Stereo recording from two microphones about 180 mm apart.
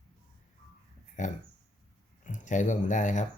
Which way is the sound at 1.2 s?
45° left (ahead or behind).